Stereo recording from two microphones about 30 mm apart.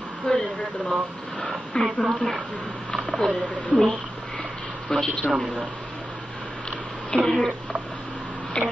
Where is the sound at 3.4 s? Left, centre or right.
Left.